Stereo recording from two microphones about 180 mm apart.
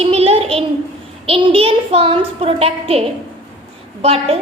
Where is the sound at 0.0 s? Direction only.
35° right (ahead or behind).